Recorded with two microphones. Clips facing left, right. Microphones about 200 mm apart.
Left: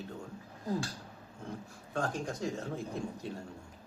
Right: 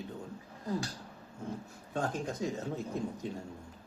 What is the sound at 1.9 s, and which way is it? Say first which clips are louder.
Speech: even; 20° right (ahead or behind).